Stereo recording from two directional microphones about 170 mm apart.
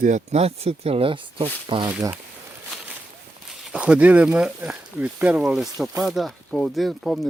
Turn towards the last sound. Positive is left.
turn(degrees=0)  # may be behind; listen again after turning